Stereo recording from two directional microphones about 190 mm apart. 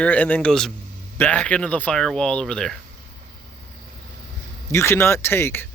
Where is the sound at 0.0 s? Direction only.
10° left (ahead or behind).